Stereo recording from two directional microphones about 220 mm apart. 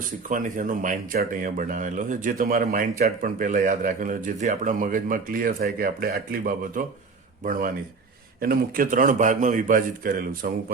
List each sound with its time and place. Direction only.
0.3 s speech: 35° right (ahead or behind)
8.4 s speech: 40° right (ahead or behind)